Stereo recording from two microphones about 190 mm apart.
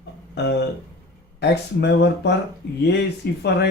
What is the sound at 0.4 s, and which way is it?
Speech, 65° left (ahead or behind).